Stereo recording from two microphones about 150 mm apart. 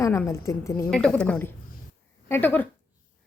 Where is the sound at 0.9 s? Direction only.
5° left (ahead or behind).